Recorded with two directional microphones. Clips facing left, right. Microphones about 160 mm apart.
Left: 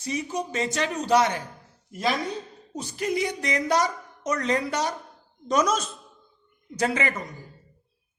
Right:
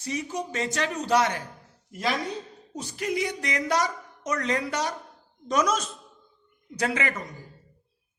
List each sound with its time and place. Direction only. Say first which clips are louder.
0.0 s speech: left 2 dB; 20° left (ahead or behind)
2.7 s speech: left 2 dB; 30° left (ahead or behind)